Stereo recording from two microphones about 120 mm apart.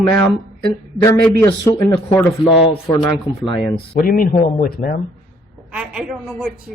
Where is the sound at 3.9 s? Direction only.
90° left.